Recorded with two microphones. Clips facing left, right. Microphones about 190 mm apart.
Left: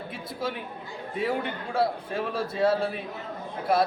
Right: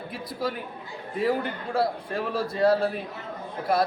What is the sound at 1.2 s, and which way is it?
A man's voice, centre (ahead or behind).